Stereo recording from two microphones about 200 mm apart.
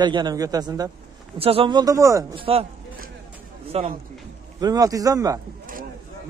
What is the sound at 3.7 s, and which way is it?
Speech, 30° right (ahead or behind).